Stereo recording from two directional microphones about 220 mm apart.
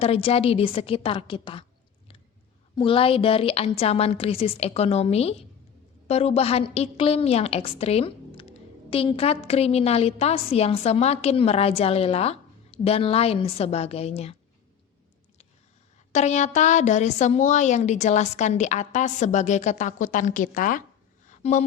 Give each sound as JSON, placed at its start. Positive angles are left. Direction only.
{"t": 0.0, "sound": "a woman's voice", "side_deg": 25}
{"t": 2.7, "sound": "a woman's voice", "side_deg": 25}
{"t": 16.1, "sound": "a woman's voice", "side_deg": 30}
{"t": 21.2, "sound": "a sound", "side_deg": 35}